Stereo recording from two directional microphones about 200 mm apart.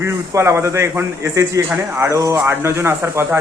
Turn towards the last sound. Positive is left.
turn(degrees=-10)  # may be behind; listen again after turning